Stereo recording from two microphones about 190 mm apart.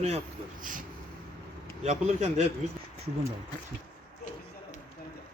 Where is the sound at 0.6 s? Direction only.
45° right (ahead or behind).